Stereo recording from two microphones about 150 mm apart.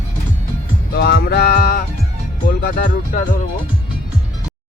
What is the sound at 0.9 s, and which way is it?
Music, 90° left.